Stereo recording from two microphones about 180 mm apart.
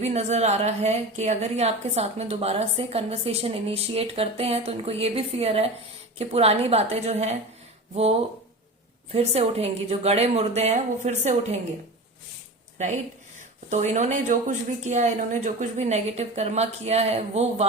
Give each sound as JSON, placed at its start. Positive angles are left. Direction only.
{"t": 0.0, "sound": "a woman's voice", "side_deg": -40}
{"t": 9.1, "sound": "a woman's voice", "side_deg": -35}
{"t": 13.7, "sound": "a woman's voice", "side_deg": -40}